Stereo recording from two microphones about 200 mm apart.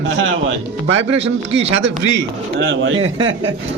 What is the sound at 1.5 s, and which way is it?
A man's voice, 65° right (ahead or behind).